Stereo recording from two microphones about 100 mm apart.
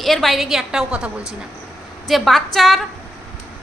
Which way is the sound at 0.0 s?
Centre (ahead or behind).